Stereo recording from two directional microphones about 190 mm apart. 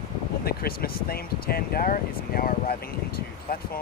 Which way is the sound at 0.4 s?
55° left (ahead or behind).